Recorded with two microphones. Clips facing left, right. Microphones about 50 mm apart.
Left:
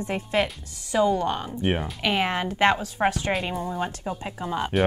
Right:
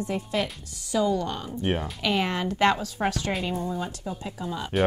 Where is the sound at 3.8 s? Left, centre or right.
Left.